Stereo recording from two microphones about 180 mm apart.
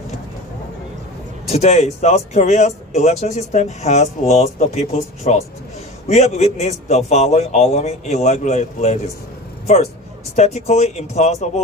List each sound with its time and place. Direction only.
1.5 s speech: 35° left (ahead or behind)
10.3 s speech: 40° left (ahead or behind)